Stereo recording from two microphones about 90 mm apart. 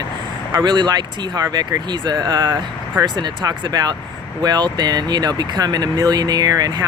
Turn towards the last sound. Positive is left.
turn(degrees=-45)  # may be behind; listen again after turning